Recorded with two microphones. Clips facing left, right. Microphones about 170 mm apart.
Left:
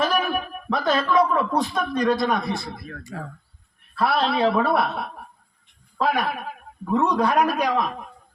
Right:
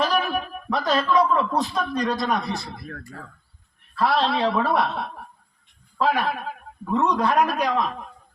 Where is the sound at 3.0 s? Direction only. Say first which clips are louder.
Left 5 dB; 90° left.